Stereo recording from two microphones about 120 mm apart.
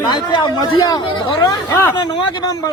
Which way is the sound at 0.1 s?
40° left (ahead or behind).